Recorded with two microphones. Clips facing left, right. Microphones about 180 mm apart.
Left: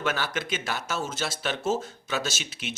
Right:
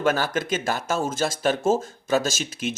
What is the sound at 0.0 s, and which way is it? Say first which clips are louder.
Speech: right 6 dB; 45° right (ahead or behind).